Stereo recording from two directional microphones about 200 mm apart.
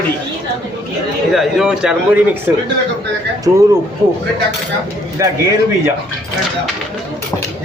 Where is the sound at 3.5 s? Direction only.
20° right (ahead or behind).